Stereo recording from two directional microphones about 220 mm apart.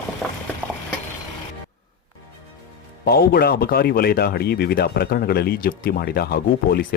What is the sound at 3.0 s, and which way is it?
Speech, 45° left (ahead or behind).